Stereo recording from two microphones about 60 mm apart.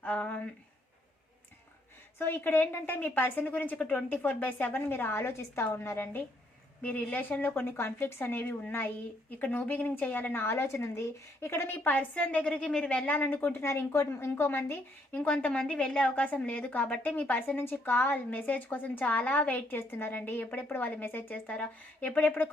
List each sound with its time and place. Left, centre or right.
0.0 s speech: left
2.1 s a woman's voice: left
6.8 s a woman's voice: left
13.1 s a woman's voice: left
13.7 s a woman's voice: left
15.3 s a woman's voice: centre